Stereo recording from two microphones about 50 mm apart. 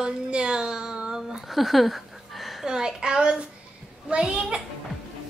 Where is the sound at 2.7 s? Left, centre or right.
Centre.